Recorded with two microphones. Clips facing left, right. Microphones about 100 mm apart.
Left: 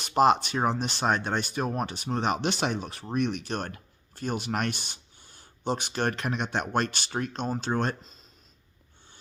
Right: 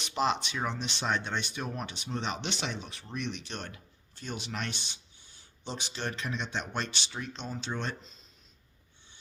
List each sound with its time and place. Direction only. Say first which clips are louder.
0.0 s speech: left 8 dB; 50° left (ahead or behind)